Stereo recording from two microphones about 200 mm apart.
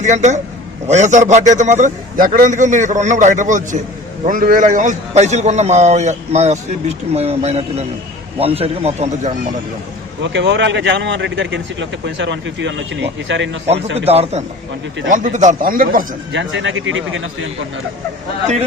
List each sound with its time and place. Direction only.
0.0 s a man's voice: 35° right (ahead or behind)
10.2 s a man's voice: 60° right (ahead or behind)
13.9 s a man's voice: 30° right (ahead or behind)
16.3 s a man's voice: 65° right (ahead or behind)